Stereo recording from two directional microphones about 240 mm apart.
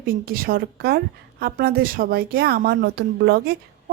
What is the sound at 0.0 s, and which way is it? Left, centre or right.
A woman's voice, right.